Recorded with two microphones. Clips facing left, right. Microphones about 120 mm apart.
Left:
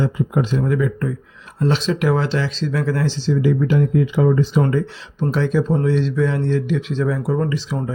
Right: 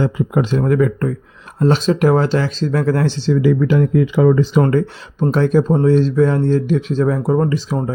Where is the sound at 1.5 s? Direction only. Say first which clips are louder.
Right 5 dB; 45° right (ahead or behind); by 4.6 s 90° right.